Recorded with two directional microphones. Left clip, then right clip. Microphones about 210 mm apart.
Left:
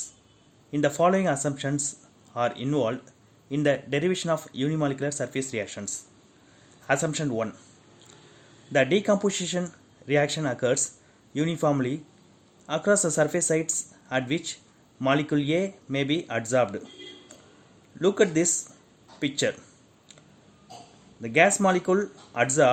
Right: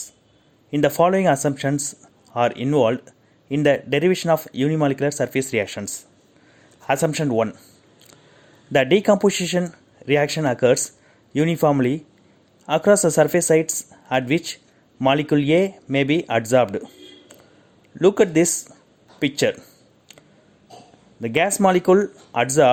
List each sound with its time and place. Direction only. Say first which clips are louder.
0.7 s speech: right 5 dB; 30° right (ahead or behind)
8.7 s speech: right 6 dB; 30° right (ahead or behind)
18.0 s speech: right 6 dB; 30° right (ahead or behind)
21.2 s speech: right 2 dB; 30° right (ahead or behind)